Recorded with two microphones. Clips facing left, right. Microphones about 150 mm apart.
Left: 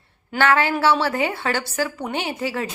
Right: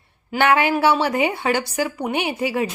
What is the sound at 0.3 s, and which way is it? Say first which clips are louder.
A woman's voice: right 2 dB; 15° right (ahead or behind).